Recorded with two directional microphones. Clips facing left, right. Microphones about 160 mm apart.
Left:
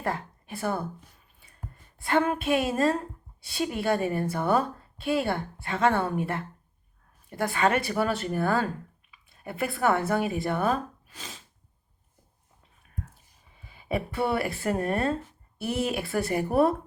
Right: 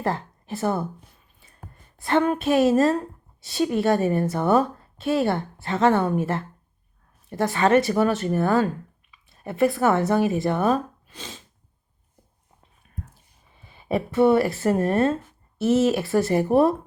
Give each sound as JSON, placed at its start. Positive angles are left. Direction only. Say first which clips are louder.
{"t": 0.0, "sound": "speech", "louder": "right 5 dB", "side_deg": -30}
{"t": 2.0, "sound": "speech", "louder": "right 4 dB", "side_deg": -25}
{"t": 13.6, "sound": "a sound", "louder": "right 5 dB", "side_deg": -30}
{"t": 14.2, "sound": "speech", "louder": "right 11 dB", "side_deg": -25}
{"t": 16.0, "sound": "speech", "louder": "right 6 dB", "side_deg": -30}